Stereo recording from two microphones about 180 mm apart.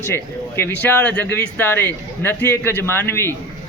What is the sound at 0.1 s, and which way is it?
Speech, 15° left (ahead or behind).